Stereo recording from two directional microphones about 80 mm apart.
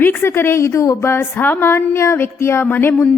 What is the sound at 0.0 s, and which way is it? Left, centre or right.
A woman's voice, left.